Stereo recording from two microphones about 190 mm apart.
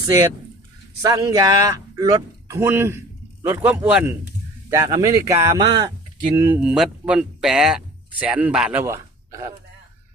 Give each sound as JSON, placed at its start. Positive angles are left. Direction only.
{"t": 1.0, "sound": "speech", "side_deg": -20}
{"t": 6.3, "sound": "speech", "side_deg": -10}
{"t": 8.8, "sound": "a sound", "side_deg": -15}